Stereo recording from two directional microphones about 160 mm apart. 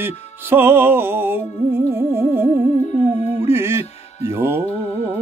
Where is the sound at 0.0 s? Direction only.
15° right (ahead or behind).